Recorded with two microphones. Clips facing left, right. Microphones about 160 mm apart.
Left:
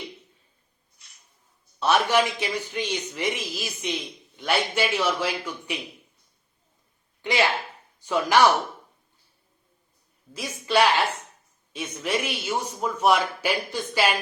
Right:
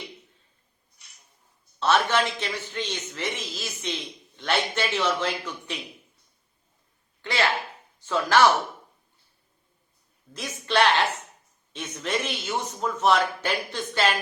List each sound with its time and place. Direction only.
1.8 s a man's voice: 10° left (ahead or behind)
7.2 s a man's voice: 15° left (ahead or behind)
10.3 s a man's voice: 10° left (ahead or behind)